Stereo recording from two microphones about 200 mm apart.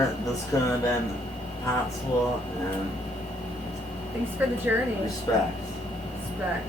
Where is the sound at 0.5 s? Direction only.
15° left (ahead or behind).